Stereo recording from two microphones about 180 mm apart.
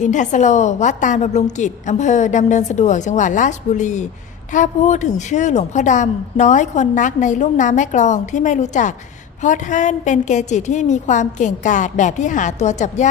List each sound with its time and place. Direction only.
0.0 s a woman's voice: 40° left (ahead or behind)